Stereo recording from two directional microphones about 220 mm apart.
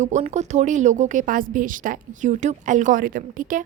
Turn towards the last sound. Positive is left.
turn(degrees=-35)  # may be behind; listen again after turning